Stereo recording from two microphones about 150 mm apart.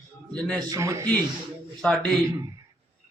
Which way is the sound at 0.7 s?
20° right (ahead or behind).